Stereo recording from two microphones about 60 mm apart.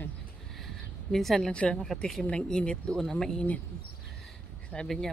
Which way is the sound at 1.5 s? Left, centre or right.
Centre.